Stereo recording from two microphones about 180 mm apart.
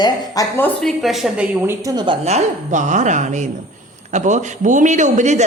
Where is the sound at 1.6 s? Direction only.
20° right (ahead or behind).